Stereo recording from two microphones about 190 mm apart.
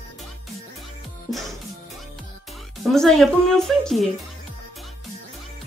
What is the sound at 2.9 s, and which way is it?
A woman's voice, centre (ahead or behind).